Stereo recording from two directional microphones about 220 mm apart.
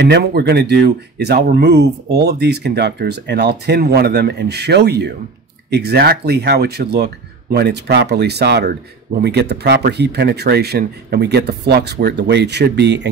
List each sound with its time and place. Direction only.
0.0 s speech: 50° right (ahead or behind)